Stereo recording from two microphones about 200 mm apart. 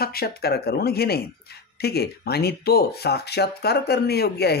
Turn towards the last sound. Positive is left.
turn(degrees=55)  # may be behind; listen again after turning